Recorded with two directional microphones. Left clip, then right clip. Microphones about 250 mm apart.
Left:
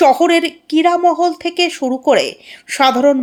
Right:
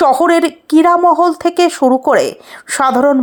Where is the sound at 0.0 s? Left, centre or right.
Centre.